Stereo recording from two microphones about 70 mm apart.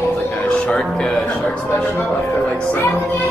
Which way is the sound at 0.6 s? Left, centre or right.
Centre.